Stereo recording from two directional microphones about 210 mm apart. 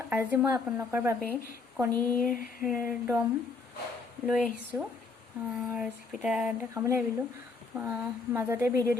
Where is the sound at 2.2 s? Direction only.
40° left (ahead or behind).